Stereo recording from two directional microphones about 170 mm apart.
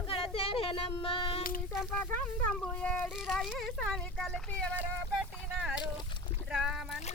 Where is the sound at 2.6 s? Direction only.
5° left (ahead or behind).